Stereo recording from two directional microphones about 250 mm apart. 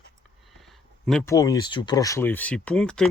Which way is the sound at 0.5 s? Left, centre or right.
Centre.